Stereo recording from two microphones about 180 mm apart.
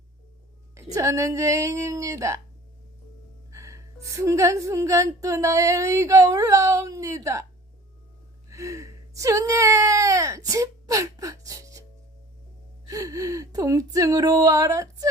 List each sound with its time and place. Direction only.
0.8 s a woman's voice: 15° right (ahead or behind)
3.5 s a woman's voice: 15° right (ahead or behind)
8.4 s whimper: 15° right (ahead or behind)
12.9 s speech: 20° right (ahead or behind)